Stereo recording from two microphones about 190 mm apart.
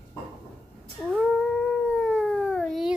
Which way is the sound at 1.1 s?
Centre (ahead or behind).